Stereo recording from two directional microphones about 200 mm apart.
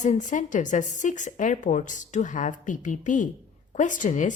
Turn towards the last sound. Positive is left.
turn(degrees=40)  # may be behind; listen again after turning